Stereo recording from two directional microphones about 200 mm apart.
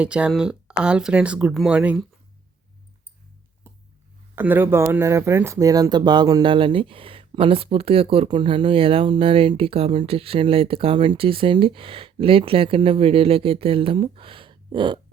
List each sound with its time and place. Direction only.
0.0 s speech: 5° right (ahead or behind)
4.4 s speech: 10° right (ahead or behind)